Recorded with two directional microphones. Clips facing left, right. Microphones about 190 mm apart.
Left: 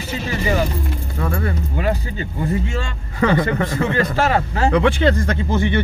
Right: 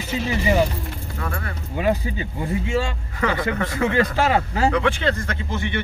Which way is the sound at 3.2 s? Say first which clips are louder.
Left 6 dB; 30° left (ahead or behind).